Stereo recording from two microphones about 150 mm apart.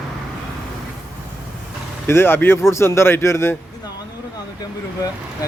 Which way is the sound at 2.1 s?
15° left (ahead or behind).